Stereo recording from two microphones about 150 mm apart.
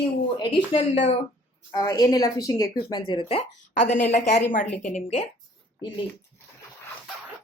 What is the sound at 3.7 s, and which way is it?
Speech, 55° left (ahead or behind).